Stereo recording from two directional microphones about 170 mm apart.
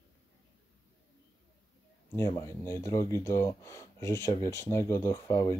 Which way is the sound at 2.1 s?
15° left (ahead or behind).